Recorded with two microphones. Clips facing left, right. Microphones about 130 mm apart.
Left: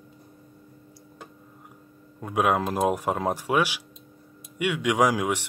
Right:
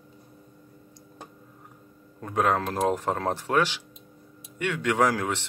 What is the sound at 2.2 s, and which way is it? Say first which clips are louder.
Speech: left 1 dB; 10° left (ahead or behind).